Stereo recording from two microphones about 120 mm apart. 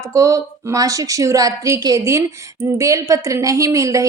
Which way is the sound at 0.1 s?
25° right (ahead or behind).